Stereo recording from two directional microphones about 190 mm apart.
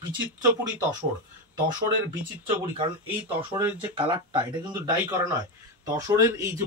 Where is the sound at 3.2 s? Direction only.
10° right (ahead or behind).